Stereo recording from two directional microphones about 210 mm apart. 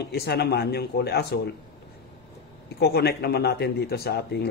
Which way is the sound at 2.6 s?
50° left (ahead or behind).